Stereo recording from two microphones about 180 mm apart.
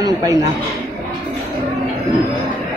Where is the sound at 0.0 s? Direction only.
20° right (ahead or behind).